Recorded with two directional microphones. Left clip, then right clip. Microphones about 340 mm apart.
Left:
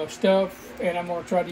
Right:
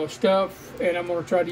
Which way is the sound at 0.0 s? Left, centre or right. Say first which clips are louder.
Even; centre.